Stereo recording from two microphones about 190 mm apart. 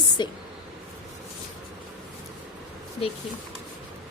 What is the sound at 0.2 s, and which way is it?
Speech, 25° left (ahead or behind).